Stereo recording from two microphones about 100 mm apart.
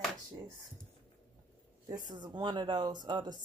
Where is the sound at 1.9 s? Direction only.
45° right (ahead or behind).